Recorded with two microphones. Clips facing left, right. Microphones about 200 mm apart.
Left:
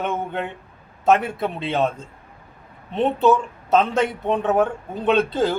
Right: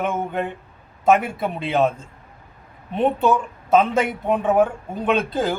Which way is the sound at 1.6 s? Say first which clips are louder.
Right 3 dB; 10° right (ahead or behind).